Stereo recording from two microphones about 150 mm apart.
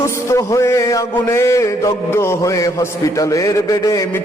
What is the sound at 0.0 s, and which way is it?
Mantra, 20° left (ahead or behind).